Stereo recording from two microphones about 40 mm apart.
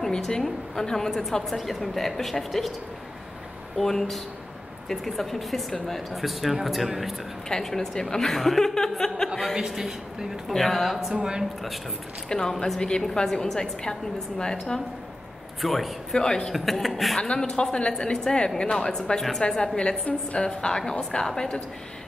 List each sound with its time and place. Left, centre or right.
0.3 s a woman's voice: centre
3.7 s a woman's voice: centre
7.4 s a woman's voice: centre
9.3 s speech: centre
9.6 s a woman's voice: centre
10.5 s speech: centre
11.1 s a woman's voice: right
12.3 s a woman's voice: centre
15.6 s speech: centre
16.1 s a woman's voice: centre
16.5 s speech: centre
17.2 s a woman's voice: left